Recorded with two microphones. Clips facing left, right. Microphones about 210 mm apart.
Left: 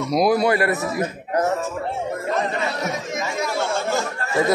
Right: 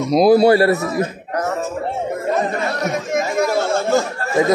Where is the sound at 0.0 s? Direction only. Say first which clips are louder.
Right 6 dB; 25° right (ahead or behind).